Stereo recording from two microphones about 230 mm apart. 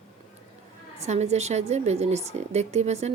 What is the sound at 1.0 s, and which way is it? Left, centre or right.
Speech, right.